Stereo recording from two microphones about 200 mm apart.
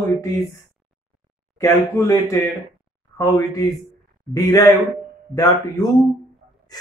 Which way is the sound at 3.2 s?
15° left (ahead or behind).